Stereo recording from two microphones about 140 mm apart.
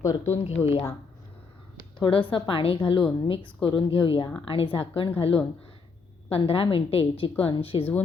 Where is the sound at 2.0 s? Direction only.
35° left (ahead or behind).